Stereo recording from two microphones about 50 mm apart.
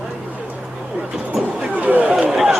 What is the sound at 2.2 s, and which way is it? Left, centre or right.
Speech, centre.